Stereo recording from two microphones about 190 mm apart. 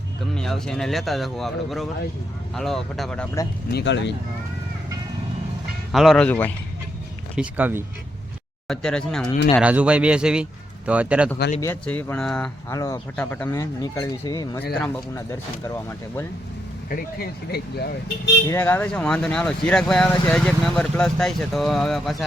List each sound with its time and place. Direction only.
0.3 s speech: 5° left (ahead or behind)
3.7 s speech: 65° left (ahead or behind)
5.9 s speech: centre (ahead or behind)
7.3 s speech: 10° right (ahead or behind)
8.6 s speech: 5° left (ahead or behind)
9.6 s speech: 5° right (ahead or behind)
11.6 s speech: 10° left (ahead or behind)
12.7 s speech: 15° left (ahead or behind)
16.9 s speech: 55° left (ahead or behind)
18.4 s speech: 15° left (ahead or behind)